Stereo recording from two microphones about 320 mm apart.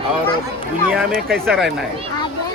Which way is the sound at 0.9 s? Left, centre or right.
Centre.